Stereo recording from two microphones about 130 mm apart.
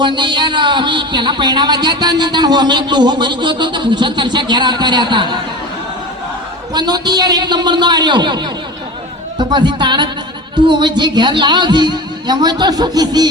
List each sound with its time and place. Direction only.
0.0 s a woman's voice: 35° right (ahead or behind)
6.7 s a woman's voice: 30° right (ahead or behind)